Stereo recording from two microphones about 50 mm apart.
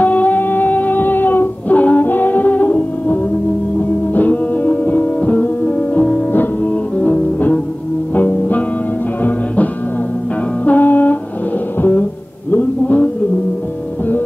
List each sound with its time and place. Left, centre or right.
0.0 s music: left
10.6 s music: left